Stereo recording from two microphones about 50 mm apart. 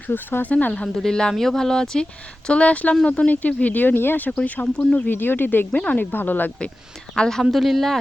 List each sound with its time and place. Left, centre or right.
0.1 s speech: left
0.5 s speech: left
1.0 s speech: centre
2.5 s speech: left
4.4 s speech: left
7.2 s speech: centre
7.5 s speech: centre